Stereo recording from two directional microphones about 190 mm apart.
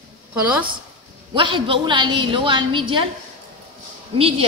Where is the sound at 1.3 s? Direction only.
25° right (ahead or behind).